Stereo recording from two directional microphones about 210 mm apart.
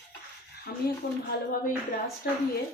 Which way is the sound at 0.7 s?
50° left (ahead or behind).